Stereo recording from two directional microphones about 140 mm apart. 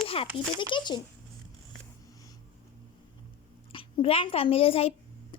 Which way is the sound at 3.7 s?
40° left (ahead or behind).